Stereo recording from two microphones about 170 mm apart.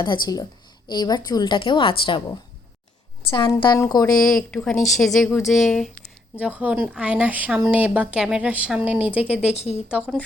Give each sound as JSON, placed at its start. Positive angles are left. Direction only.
{"t": 0.0, "sound": "a woman's voice", "side_deg": 25}
{"t": 3.2, "sound": "a woman's voice", "side_deg": 30}
{"t": 4.2, "sound": "a woman's voice", "side_deg": 5}
{"t": 9.6, "sound": "speech", "side_deg": 40}